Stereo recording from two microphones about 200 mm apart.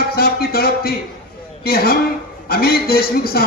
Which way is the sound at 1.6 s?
50° left (ahead or behind).